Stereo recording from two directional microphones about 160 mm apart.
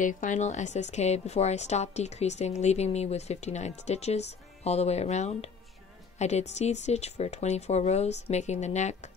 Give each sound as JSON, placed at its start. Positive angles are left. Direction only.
{"t": 0.0, "sound": "a woman's voice", "side_deg": 55}